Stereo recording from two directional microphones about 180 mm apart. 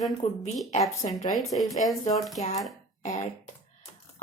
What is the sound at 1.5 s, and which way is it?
Speech, centre (ahead or behind).